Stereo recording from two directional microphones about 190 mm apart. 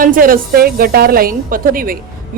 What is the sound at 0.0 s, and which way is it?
A woman's voice, 50° right (ahead or behind).